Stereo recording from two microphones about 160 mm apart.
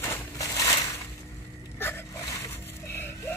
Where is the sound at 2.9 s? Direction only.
15° left (ahead or behind).